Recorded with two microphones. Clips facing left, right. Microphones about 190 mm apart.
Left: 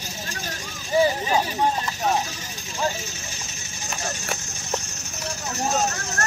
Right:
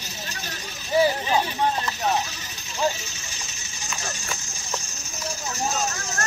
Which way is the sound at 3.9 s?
55° left (ahead or behind).